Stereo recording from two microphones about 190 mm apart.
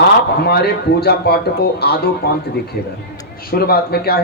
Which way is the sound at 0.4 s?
60° left (ahead or behind).